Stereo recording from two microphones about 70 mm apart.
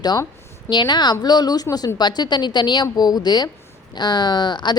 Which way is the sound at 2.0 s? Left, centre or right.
Left.